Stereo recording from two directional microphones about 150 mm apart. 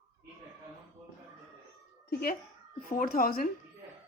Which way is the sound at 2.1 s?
90° left.